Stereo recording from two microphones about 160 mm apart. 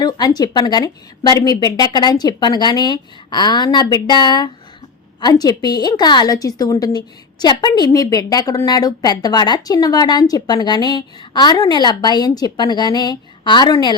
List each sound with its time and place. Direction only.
0.0 s a woman's voice: 25° left (ahead or behind)